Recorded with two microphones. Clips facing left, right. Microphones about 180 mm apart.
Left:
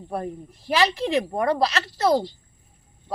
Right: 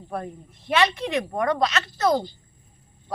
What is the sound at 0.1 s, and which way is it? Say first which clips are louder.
Speech: left 3 dB; 30° left (ahead or behind).